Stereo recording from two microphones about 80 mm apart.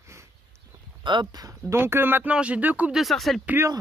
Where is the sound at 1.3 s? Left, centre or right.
Right.